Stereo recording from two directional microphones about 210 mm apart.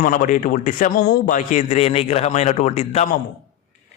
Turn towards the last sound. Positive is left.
turn(degrees=35)  # may be behind; listen again after turning